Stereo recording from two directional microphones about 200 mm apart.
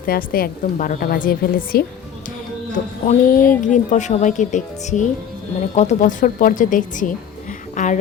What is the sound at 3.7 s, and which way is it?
Speech, 35° left (ahead or behind).